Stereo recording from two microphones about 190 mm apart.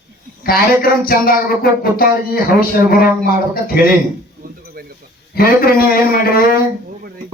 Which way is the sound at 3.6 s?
50° left (ahead or behind).